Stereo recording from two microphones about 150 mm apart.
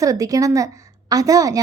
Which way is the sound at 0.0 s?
20° right (ahead or behind).